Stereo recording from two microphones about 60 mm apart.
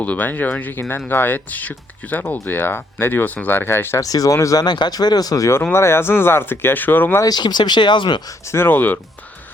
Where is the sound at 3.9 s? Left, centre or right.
Left.